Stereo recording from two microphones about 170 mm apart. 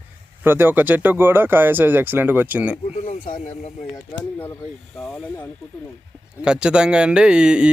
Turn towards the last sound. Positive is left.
turn(degrees=-5)  # may be behind; listen again after turning